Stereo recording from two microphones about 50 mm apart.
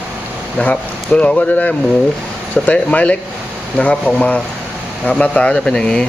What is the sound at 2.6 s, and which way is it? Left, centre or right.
Speech, centre.